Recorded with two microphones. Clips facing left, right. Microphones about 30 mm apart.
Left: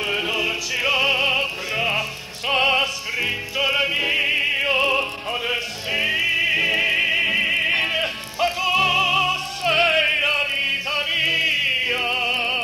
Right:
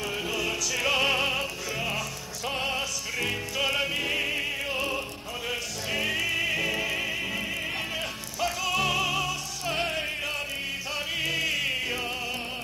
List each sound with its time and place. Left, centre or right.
0.0 s opera: left
3.2 s music: left
5.5 s music: left